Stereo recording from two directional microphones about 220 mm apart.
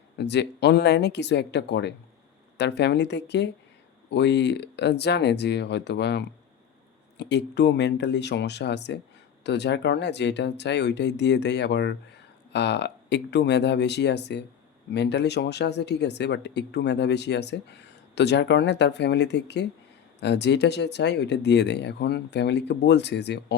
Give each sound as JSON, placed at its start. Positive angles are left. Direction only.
{"t": 0.2, "sound": "speech", "side_deg": 50}